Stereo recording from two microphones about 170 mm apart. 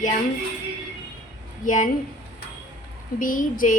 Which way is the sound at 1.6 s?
50° left (ahead or behind).